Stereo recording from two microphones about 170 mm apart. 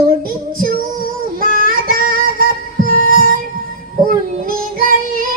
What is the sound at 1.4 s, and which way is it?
Music, 55° right (ahead or behind).